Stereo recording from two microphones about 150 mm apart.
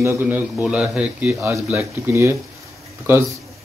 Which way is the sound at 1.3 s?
20° right (ahead or behind).